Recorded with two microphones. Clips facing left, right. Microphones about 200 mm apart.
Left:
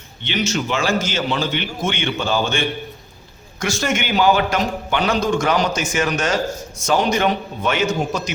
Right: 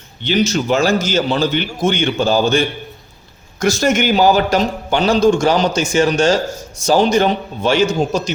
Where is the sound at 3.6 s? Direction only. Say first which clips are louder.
Right 7 dB; 40° right (ahead or behind).